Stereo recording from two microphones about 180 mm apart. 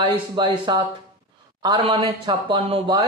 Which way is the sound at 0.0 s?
25° right (ahead or behind).